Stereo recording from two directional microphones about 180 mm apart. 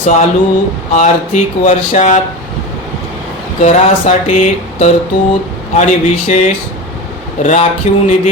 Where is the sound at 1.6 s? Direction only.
40° left (ahead or behind).